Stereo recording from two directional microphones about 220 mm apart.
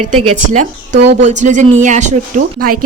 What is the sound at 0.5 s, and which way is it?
A woman's voice, 40° right (ahead or behind).